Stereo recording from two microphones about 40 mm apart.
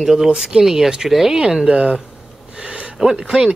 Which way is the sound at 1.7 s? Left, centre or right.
Right.